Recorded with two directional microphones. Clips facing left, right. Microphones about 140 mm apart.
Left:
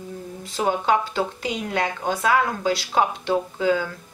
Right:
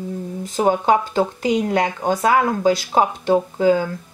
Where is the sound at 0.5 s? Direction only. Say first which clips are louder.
Right 4 dB; 40° right (ahead or behind).